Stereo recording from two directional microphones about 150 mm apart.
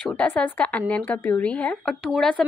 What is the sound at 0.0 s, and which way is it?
A woman's voice, 10° left (ahead or behind).